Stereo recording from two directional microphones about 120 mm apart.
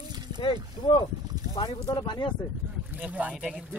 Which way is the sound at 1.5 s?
35° left (ahead or behind).